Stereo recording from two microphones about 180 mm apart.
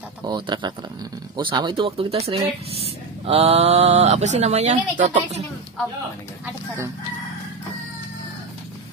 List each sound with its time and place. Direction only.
0.2 s speech: 25° right (ahead or behind)